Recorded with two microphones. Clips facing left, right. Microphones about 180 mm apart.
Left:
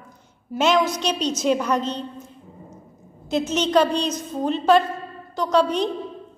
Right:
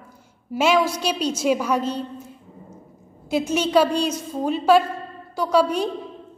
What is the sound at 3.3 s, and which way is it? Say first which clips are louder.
A woman's voice: even; 10° right (ahead or behind).